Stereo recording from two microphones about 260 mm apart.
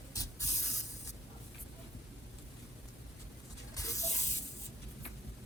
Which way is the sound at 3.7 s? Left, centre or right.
Centre.